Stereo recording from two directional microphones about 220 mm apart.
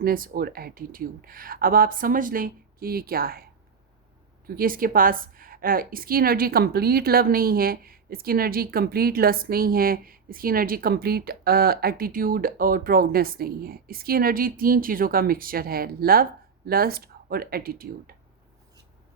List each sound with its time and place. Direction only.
0.0 s a woman's voice: 40° right (ahead or behind)
4.4 s a woman's voice: 40° right (ahead or behind)